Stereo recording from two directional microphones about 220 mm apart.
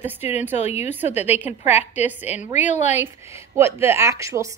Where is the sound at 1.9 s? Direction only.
5° right (ahead or behind).